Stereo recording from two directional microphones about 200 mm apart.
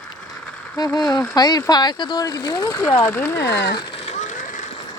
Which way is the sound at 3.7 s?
35° left (ahead or behind).